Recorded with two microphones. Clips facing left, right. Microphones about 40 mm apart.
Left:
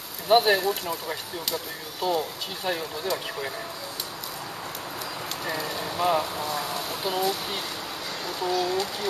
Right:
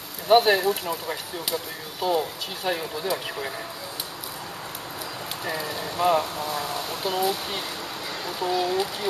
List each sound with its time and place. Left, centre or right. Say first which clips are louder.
0.3 s speech: right 2 dB; centre
5.4 s speech: right 1 dB; centre